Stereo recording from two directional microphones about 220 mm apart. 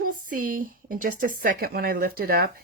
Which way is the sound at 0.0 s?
40° right (ahead or behind).